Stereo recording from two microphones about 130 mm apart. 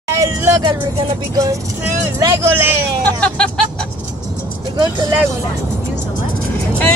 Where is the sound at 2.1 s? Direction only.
20° right (ahead or behind).